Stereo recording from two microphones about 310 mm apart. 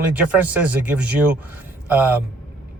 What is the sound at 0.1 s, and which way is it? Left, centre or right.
A man's voice, centre.